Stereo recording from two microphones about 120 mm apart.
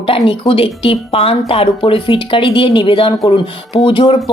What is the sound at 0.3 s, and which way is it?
Speech, 50° left (ahead or behind).